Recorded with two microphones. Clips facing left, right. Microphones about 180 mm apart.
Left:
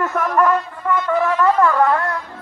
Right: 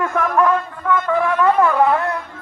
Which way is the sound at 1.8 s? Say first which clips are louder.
Right 1 dB; 5° right (ahead or behind).